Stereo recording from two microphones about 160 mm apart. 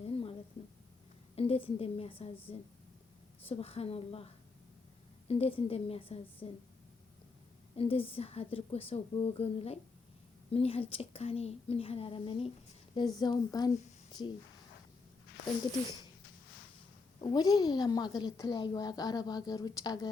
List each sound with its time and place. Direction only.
0.0 s a sound: 35° left (ahead or behind)
1.4 s a woman's voice: 35° left (ahead or behind)
3.4 s a woman's voice: 40° left (ahead or behind)
5.3 s a woman's voice: 35° left (ahead or behind)
7.8 s a woman's voice: 35° left (ahead or behind)
17.2 s a woman's voice: 25° left (ahead or behind)